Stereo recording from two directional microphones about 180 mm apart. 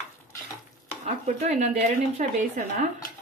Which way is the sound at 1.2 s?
40° right (ahead or behind).